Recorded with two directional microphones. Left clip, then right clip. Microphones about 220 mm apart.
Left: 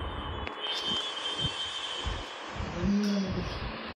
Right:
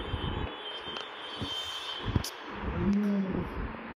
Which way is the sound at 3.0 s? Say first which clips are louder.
Left 1 dB; 5° right (ahead or behind).